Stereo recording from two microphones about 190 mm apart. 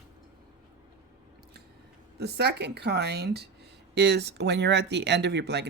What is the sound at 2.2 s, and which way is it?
Speech, 60° right (ahead or behind).